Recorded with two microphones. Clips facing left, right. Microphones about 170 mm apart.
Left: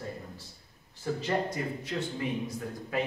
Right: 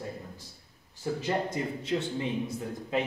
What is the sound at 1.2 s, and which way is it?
Speech, 25° right (ahead or behind).